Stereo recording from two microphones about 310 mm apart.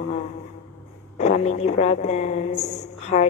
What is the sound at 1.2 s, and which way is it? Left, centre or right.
A woman's voice, left.